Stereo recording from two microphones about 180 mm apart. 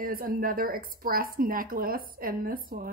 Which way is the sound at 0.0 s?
50° right (ahead or behind).